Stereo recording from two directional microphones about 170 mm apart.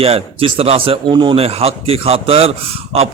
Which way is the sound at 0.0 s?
35° right (ahead or behind).